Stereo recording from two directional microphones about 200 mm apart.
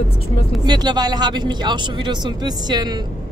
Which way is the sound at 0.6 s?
20° right (ahead or behind).